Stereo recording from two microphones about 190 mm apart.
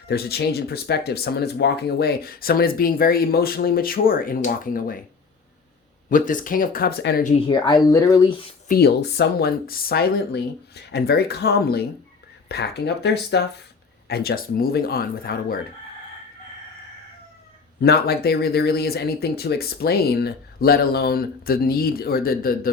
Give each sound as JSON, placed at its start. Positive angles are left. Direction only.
{"t": 0.1, "sound": "speech", "side_deg": 55}
{"t": 6.1, "sound": "speech", "side_deg": 45}
{"t": 7.4, "sound": "speech", "side_deg": 25}
{"t": 8.6, "sound": "speech", "side_deg": 55}
{"t": 17.7, "sound": "speech", "side_deg": 55}